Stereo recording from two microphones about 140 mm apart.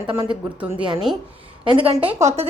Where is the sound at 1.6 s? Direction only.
40° right (ahead or behind).